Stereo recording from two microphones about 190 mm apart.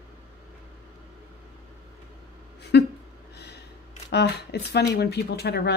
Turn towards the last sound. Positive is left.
turn(degrees=60)  # may be behind; listen again after turning